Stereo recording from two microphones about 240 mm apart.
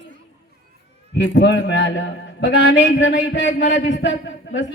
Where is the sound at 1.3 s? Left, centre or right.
Left.